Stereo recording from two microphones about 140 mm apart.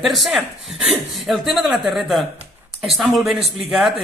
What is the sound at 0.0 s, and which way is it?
Speech, centre (ahead or behind).